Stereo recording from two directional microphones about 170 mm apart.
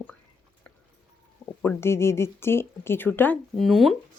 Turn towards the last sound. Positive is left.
turn(degrees=0)  # may be behind; listen again after turning